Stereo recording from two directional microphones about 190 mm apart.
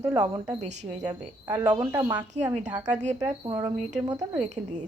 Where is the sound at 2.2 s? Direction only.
40° right (ahead or behind).